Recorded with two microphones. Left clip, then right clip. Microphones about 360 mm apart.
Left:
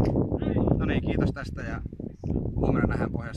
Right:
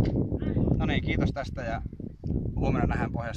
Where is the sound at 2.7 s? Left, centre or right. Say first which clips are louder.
Left 2 dB; centre.